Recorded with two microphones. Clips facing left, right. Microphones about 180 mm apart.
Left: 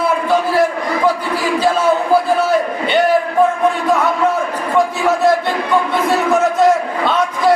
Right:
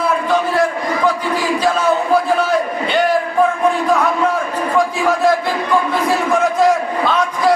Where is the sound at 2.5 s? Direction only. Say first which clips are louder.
Left 2 dB; centre (ahead or behind).